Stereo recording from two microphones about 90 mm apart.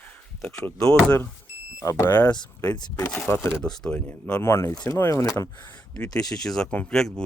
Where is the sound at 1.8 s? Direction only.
35° left (ahead or behind).